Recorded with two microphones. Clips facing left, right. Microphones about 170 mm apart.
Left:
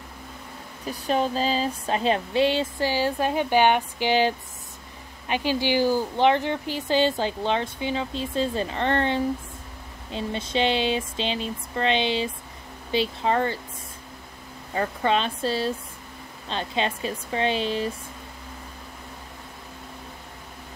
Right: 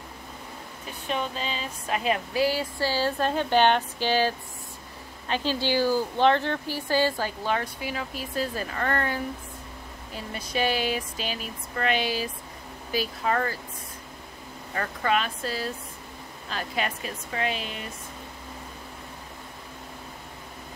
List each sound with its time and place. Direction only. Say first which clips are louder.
0.8 s speech: left 6 dB; 35° left (ahead or behind)
14.7 s speech: left 3 dB; 25° left (ahead or behind)